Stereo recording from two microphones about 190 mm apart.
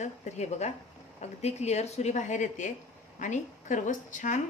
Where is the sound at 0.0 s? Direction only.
35° left (ahead or behind).